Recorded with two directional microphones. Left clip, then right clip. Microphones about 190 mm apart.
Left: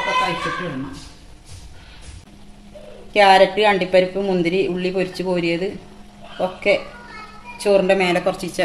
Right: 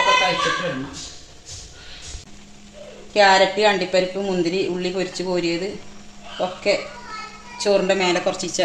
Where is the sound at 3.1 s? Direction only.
15° left (ahead or behind).